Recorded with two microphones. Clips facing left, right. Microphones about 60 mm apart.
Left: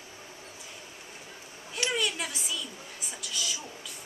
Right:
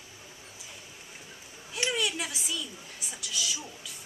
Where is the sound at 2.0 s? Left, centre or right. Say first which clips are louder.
Even; centre.